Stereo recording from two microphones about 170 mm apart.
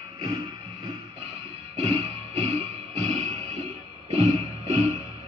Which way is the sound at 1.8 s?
35° right (ahead or behind).